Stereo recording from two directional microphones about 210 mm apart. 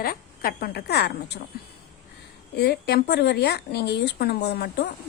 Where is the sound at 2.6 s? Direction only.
50° left (ahead or behind).